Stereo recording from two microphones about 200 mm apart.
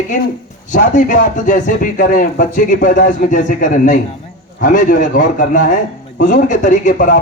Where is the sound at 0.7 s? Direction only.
40° left (ahead or behind).